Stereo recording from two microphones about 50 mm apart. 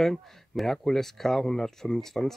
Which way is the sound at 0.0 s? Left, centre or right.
Centre.